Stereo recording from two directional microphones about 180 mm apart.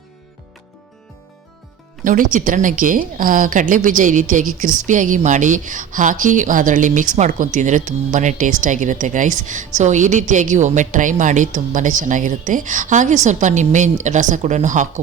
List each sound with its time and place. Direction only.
2.0 s a woman's voice: 50° right (ahead or behind)